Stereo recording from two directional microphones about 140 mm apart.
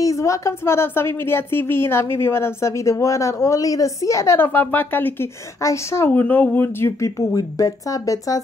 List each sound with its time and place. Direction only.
0.0 s a woman's voice: 25° left (ahead or behind)